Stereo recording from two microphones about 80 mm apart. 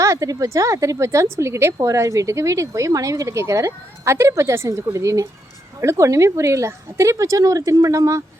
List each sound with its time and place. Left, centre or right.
0.0 s a woman's voice: right